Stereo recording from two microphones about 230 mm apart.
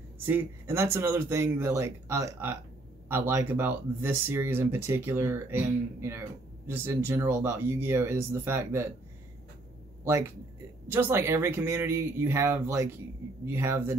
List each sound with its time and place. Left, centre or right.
0.3 s speech: centre
10.9 s speech: centre